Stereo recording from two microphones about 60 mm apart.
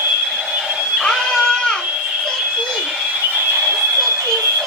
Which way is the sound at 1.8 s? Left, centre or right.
Centre.